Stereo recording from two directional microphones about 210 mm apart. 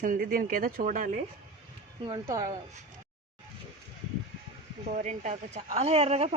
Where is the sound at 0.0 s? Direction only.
40° right (ahead or behind).